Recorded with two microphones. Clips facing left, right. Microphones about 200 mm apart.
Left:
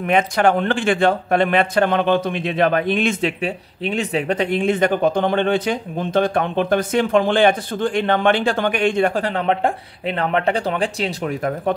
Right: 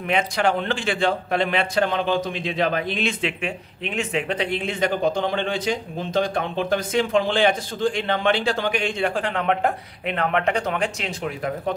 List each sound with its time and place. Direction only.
0.0 s a man's voice: 50° left (ahead or behind); by 11.3 s 35° left (ahead or behind)